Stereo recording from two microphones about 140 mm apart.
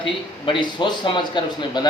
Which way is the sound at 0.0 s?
35° left (ahead or behind).